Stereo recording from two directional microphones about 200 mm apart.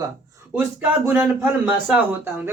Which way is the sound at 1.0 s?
10° right (ahead or behind).